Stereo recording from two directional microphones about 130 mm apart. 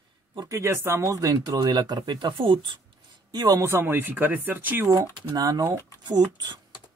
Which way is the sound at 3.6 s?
15° right (ahead or behind).